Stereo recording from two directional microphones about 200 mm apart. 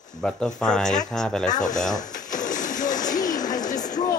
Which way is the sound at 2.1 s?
40° left (ahead or behind).